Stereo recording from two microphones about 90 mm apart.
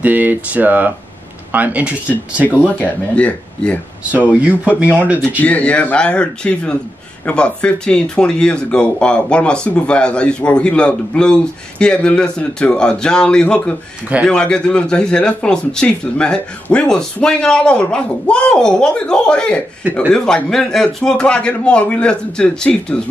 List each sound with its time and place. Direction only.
0.0 s speech: 20° right (ahead or behind)
2.4 s speech: 20° left (ahead or behind)
4.3 s speech: 15° right (ahead or behind)
5.4 s speech: 15° left (ahead or behind)